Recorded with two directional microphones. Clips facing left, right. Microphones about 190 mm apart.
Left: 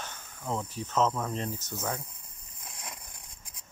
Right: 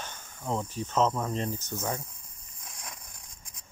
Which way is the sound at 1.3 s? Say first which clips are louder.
Right 2 dB; 5° left (ahead or behind).